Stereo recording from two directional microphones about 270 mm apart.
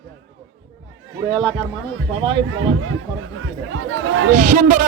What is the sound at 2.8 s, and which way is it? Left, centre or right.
Speech, right.